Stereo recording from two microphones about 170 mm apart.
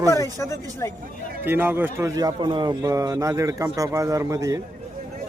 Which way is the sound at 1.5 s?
10° right (ahead or behind).